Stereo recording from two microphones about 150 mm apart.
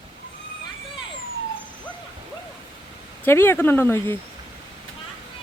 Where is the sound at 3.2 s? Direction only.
15° left (ahead or behind).